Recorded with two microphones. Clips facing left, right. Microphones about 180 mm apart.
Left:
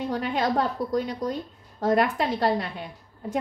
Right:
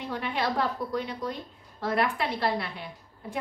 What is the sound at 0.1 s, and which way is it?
A woman's voice, 40° left (ahead or behind).